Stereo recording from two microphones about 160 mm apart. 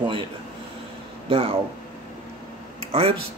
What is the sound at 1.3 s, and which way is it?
Speech, 35° right (ahead or behind).